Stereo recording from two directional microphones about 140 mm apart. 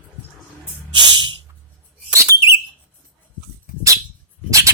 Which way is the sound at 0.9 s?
35° right (ahead or behind).